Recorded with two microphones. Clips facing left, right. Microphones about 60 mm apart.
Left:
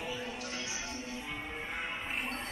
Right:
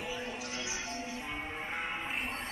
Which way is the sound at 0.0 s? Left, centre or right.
Centre.